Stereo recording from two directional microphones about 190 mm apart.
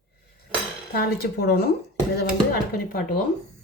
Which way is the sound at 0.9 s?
55° left (ahead or behind).